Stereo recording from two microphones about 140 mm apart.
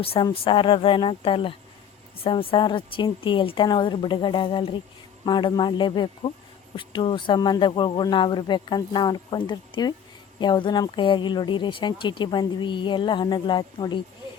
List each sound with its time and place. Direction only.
0.0 s a woman's voice: 45° left (ahead or behind)